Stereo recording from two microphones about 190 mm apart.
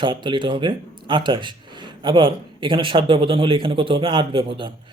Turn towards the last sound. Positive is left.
turn(degrees=-25)  # may be behind; listen again after turning